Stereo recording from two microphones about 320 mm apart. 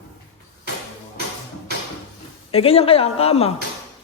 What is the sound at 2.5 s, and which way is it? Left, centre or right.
A woman's voice, centre.